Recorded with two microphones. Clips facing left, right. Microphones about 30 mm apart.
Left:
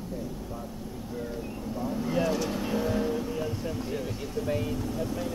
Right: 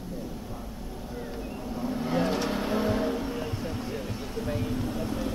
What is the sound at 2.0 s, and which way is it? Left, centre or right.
Vehicle, right.